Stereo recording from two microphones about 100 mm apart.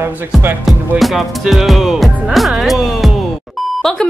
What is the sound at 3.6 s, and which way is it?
Beep, centre (ahead or behind).